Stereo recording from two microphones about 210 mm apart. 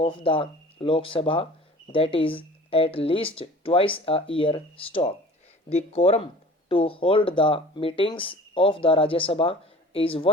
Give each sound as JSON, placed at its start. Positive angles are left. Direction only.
{"t": 0.0, "sound": "speech", "side_deg": 25}